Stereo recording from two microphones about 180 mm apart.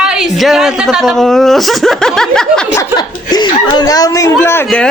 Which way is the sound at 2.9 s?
25° left (ahead or behind).